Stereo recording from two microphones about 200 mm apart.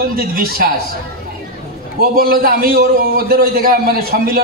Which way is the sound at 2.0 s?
50° right (ahead or behind).